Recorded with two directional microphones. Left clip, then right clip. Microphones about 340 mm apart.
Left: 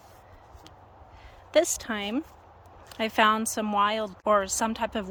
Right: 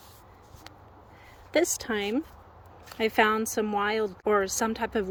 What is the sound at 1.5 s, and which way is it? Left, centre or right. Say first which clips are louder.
Speech: left 2 dB; centre.